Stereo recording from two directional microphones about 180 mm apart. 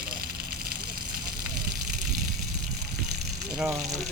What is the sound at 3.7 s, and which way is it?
Speech, 20° right (ahead or behind).